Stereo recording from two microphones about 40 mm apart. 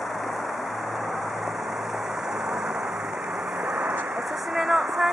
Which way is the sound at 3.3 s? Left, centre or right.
Centre.